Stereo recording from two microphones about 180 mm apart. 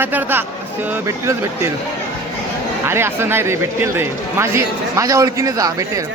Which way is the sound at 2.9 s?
15° right (ahead or behind).